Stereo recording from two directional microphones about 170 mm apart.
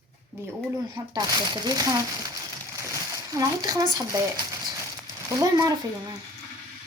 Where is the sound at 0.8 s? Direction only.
25° right (ahead or behind).